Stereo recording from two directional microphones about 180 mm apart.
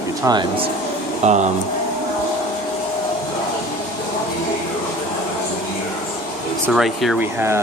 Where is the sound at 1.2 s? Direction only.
40° right (ahead or behind).